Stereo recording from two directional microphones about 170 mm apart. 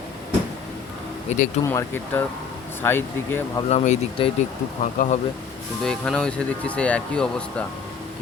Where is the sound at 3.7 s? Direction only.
35° left (ahead or behind).